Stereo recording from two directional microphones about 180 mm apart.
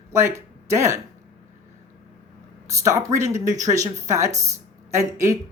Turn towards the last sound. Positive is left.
turn(degrees=-15)  # may be behind; listen again after turning